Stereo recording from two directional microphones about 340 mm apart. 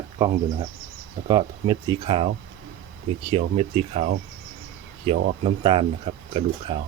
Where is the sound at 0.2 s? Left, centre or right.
Centre.